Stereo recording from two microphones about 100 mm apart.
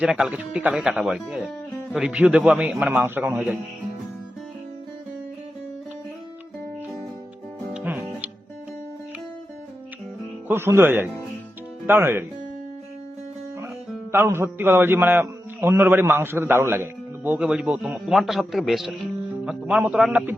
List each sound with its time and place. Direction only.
0.0 s speech: 10° right (ahead or behind)
2.9 s speech: 15° right (ahead or behind)
7.7 s music: 15° right (ahead or behind)
10.5 s a man's voice: 25° right (ahead or behind)
14.1 s a man's voice: 25° right (ahead or behind)